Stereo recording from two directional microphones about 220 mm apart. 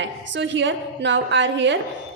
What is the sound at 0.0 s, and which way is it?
A woman's voice, 55° right (ahead or behind).